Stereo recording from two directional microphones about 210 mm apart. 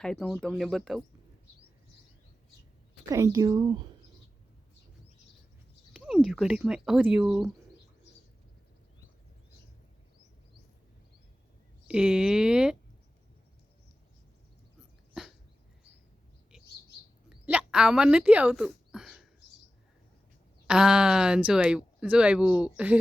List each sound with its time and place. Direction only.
0.0 s speech: centre (ahead or behind)
3.1 s speech: 15° right (ahead or behind)
5.9 s speech: 5° right (ahead or behind)
11.9 s speech: 5° right (ahead or behind)
17.2 s a sound: 5° right (ahead or behind)
20.7 s speech: 5° right (ahead or behind)